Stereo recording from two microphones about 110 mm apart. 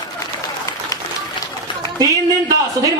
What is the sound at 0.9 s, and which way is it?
Run, 35° left (ahead or behind).